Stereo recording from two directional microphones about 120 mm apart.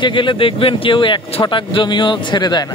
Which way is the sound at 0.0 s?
45° left (ahead or behind).